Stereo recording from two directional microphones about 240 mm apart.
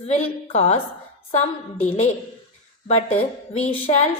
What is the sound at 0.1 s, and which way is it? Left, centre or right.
A woman's voice, left.